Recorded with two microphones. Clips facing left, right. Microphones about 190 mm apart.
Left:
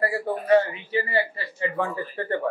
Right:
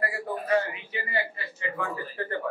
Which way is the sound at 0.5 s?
30° left (ahead or behind).